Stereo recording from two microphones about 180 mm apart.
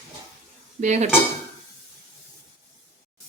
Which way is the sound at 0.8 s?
40° right (ahead or behind).